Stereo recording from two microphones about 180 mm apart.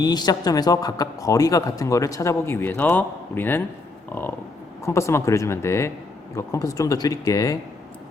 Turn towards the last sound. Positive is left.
turn(degrees=20)  # may be behind; listen again after turning